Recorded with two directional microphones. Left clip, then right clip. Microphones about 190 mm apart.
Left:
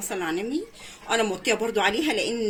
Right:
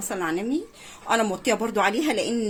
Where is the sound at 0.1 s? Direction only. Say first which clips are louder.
Right 1 dB; 50° right (ahead or behind).